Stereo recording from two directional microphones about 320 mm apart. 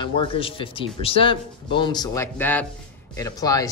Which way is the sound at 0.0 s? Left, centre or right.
Centre.